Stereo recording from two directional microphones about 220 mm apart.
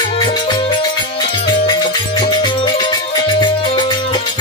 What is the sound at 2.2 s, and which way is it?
Music, 20° left (ahead or behind).